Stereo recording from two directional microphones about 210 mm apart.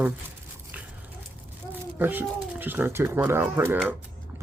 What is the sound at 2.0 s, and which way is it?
Speech, 10° right (ahead or behind).